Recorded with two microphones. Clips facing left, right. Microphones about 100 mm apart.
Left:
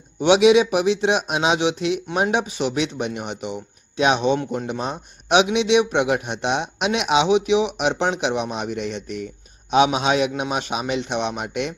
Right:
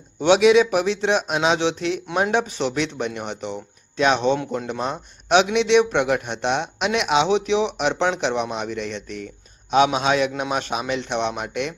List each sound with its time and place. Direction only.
0.2 s speech: 15° left (ahead or behind)